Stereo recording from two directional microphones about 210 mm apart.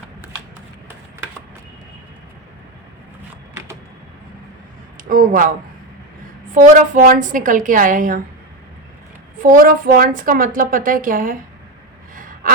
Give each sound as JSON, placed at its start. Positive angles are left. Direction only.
{"t": 5.0, "sound": "a woman's voice", "side_deg": -40}
{"t": 9.4, "sound": "a woman's voice", "side_deg": -40}
{"t": 12.1, "sound": "gasp", "side_deg": -40}